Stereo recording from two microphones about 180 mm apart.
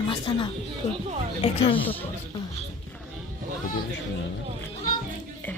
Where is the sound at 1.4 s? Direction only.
30° left (ahead or behind).